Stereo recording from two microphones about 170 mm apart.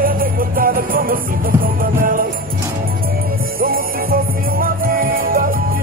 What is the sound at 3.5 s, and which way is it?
Music, 60° right (ahead or behind).